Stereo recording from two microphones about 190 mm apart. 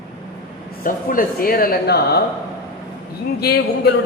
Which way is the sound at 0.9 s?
50° left (ahead or behind).